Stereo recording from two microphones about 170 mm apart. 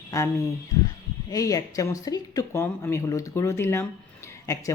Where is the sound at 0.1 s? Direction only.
20° left (ahead or behind).